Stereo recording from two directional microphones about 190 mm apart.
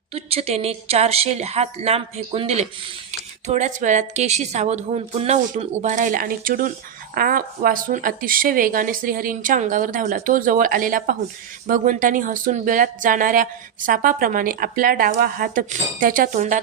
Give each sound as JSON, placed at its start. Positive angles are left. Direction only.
{"t": 0.1, "sound": "a woman's voice", "side_deg": -30}